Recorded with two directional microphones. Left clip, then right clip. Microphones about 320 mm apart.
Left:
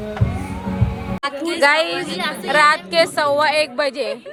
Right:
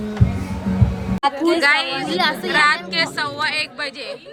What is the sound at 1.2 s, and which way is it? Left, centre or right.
Speech, right.